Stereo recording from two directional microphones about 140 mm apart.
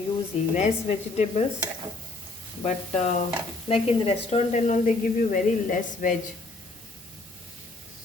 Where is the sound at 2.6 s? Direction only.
55° left (ahead or behind).